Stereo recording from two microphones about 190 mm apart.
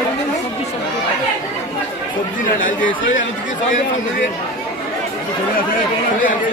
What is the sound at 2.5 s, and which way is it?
Speech, 45° left (ahead or behind).